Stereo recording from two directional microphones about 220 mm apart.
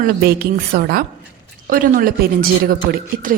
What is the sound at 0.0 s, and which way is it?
A woman's voice, 45° right (ahead or behind).